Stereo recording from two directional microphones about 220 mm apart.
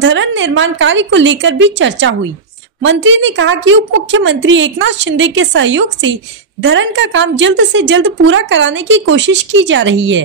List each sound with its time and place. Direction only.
0.0 s a woman's voice: 55° right (ahead or behind)